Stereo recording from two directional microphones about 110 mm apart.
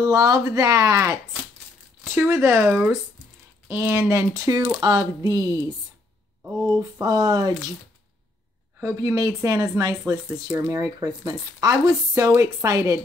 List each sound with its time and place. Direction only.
0.0 s speech: 35° right (ahead or behind)
7.0 s speech: 35° right (ahead or behind)
8.7 s speech: 30° right (ahead or behind)